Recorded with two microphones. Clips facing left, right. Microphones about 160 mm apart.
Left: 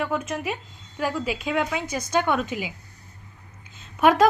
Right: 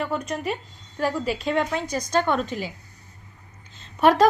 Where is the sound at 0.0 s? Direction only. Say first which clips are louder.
Even; 5° left (ahead or behind).